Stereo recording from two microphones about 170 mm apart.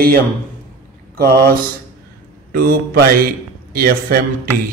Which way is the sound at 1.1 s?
60° right (ahead or behind).